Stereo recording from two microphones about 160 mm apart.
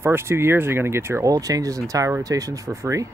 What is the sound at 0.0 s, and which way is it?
Speech, 15° right (ahead or behind).